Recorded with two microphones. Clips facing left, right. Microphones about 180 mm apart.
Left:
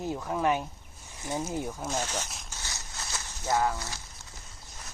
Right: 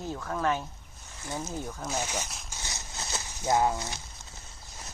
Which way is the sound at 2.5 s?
20° right (ahead or behind).